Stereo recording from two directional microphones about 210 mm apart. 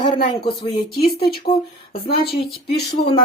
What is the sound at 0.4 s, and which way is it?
Speech, 25° left (ahead or behind).